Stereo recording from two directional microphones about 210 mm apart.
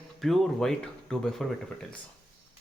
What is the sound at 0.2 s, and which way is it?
Speech, centre (ahead or behind).